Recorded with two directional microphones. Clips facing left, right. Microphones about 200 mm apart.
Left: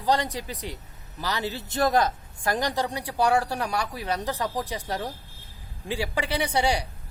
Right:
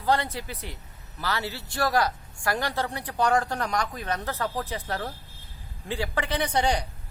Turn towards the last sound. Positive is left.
turn(degrees=10)  # may be behind; listen again after turning